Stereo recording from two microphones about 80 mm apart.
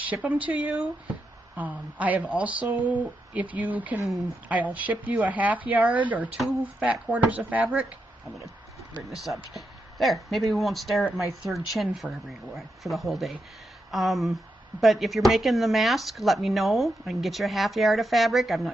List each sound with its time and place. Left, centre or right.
0.1 s speech: centre
9.1 s a woman's voice: centre